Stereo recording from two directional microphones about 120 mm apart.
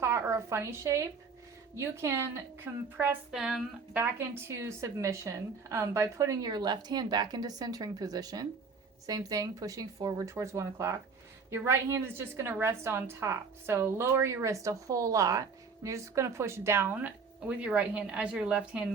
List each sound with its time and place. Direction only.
0.0 s a sound: 25° right (ahead or behind)
1.7 s a woman's voice: 20° right (ahead or behind)
3.3 s speech: 5° right (ahead or behind)
3.9 s a woman's voice: 15° right (ahead or behind)